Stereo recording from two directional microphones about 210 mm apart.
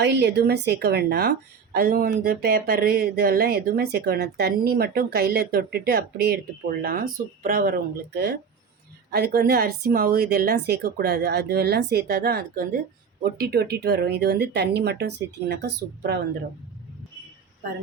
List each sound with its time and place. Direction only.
0.0 s speech: 55° right (ahead or behind)